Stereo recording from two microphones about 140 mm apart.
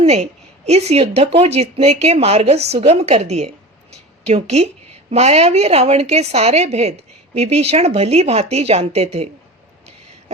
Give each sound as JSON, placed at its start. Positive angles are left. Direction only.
{"t": 0.0, "sound": "a woman's voice", "side_deg": -50}